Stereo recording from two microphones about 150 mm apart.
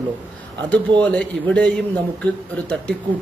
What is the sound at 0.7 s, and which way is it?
A man's voice, 10° left (ahead or behind).